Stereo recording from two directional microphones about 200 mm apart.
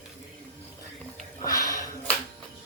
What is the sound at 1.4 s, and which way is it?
Sniff, 15° left (ahead or behind).